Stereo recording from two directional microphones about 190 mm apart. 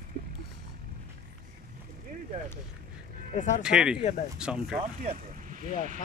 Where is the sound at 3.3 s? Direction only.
40° left (ahead or behind).